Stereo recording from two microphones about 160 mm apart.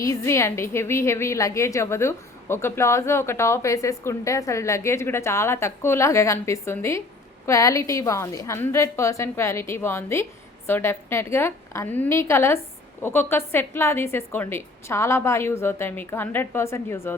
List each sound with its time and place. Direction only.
0.0 s a woman's voice: 20° left (ahead or behind)